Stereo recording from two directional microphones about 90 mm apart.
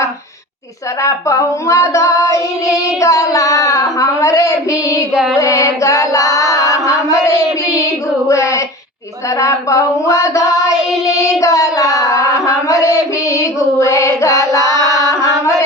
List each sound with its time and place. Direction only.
1.0 s child singing: 35° left (ahead or behind)
5.1 s mantra: 5° right (ahead or behind)
5.4 s female singing: 35° left (ahead or behind)
8.3 s child singing: 35° left (ahead or behind)
13.4 s female singing: 35° left (ahead or behind)